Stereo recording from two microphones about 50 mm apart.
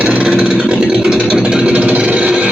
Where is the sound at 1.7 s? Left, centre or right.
Right.